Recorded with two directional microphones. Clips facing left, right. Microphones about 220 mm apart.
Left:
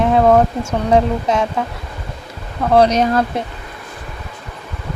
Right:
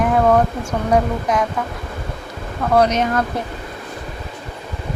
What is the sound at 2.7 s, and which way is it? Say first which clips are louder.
Speech: left 3 dB; 30° left (ahead or behind).